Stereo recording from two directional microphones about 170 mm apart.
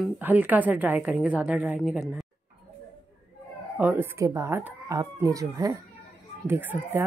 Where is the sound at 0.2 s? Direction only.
10° right (ahead or behind).